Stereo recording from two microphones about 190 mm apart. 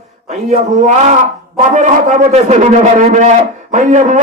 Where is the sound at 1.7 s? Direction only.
40° right (ahead or behind).